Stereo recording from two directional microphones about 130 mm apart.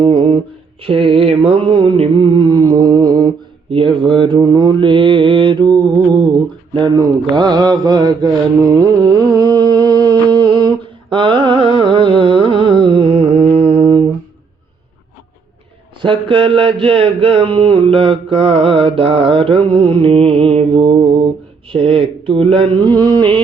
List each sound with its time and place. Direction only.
0.0 s music: 45° right (ahead or behind)
0.8 s mantra: 45° right (ahead or behind)
3.7 s mantra: 40° right (ahead or behind)
16.0 s mantra: 40° right (ahead or behind)